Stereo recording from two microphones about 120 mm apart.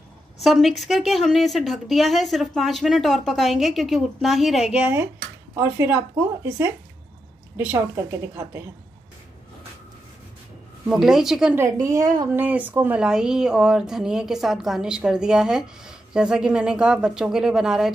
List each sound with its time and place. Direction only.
0.4 s speech: centre (ahead or behind); by 8.6 s 20° right (ahead or behind)
10.9 s speech: 5° right (ahead or behind)
11.5 s speech: 25° right (ahead or behind)
12.4 s speech: 15° right (ahead or behind)